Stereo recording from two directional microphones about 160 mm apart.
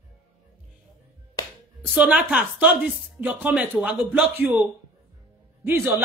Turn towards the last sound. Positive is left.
turn(degrees=-15)  # may be behind; listen again after turning